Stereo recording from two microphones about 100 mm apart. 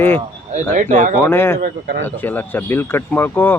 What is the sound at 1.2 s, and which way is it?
Speech, 25° left (ahead or behind).